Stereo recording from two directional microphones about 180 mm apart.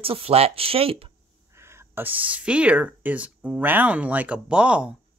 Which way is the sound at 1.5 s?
15° right (ahead or behind).